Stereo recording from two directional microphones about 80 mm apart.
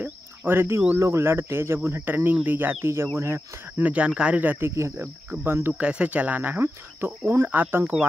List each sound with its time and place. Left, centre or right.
0.5 s cricket: right
0.9 s speech: right
2.4 s cricket: right
3.2 s speech: right
3.8 s cricket: centre
5.7 s cricket: centre